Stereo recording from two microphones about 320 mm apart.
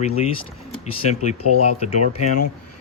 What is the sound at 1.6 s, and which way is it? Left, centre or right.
Speech, centre.